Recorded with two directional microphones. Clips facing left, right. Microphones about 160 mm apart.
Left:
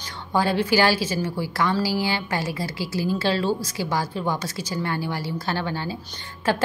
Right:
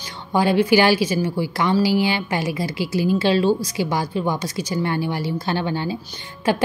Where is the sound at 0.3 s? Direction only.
15° right (ahead or behind).